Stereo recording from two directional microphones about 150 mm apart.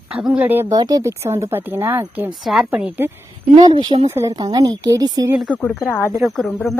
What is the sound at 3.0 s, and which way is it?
Speech, 15° right (ahead or behind).